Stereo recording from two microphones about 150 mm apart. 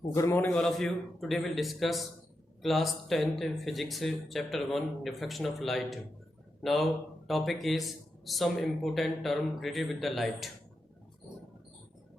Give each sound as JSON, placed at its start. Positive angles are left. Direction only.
{"t": 0.2, "sound": "a man's voice", "side_deg": 20}
{"t": 0.5, "sound": "a man's voice", "side_deg": 0}